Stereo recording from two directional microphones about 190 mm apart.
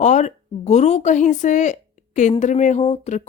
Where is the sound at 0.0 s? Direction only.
40° left (ahead or behind).